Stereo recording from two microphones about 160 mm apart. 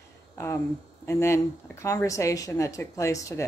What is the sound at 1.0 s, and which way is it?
A woman's voice, 15° left (ahead or behind).